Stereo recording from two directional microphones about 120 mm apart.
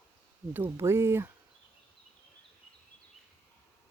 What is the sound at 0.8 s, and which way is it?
Speech, 20° right (ahead or behind).